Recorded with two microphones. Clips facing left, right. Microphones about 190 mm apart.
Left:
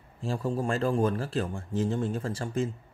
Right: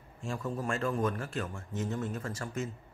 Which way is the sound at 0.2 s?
30° left (ahead or behind).